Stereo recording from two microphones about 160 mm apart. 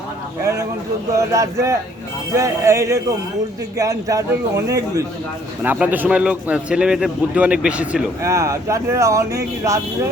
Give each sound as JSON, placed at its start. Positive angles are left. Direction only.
{"t": 0.4, "sound": "a man's voice", "side_deg": -20}
{"t": 8.2, "sound": "a man's voice", "side_deg": -20}